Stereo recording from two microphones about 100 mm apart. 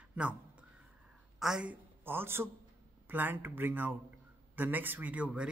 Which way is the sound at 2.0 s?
20° right (ahead or behind).